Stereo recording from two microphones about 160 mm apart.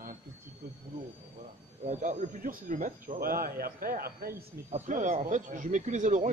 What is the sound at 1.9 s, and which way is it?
Speech, 50° right (ahead or behind).